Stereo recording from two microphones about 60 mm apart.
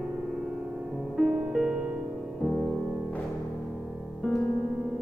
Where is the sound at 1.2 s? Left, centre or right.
Centre.